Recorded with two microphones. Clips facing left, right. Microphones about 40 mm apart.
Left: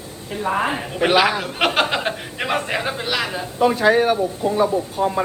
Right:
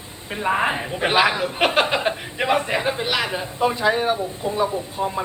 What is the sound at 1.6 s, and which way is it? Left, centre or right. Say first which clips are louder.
Speech: even; centre.